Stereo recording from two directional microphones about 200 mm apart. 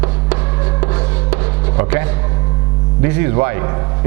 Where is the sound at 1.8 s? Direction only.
15° right (ahead or behind).